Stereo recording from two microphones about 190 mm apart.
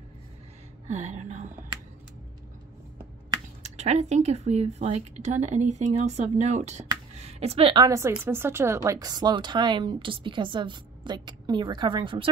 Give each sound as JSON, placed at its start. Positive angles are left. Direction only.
{"t": 0.8, "sound": "speech", "side_deg": -35}
{"t": 3.6, "sound": "a woman's voice", "side_deg": -35}